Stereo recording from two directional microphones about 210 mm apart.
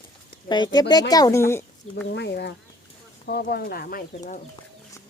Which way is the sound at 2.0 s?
55° left (ahead or behind).